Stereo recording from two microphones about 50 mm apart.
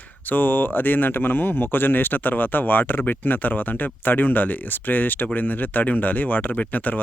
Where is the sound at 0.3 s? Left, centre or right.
Left.